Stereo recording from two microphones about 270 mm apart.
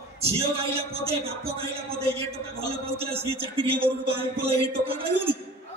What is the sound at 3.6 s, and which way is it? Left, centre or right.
A man's voice, right.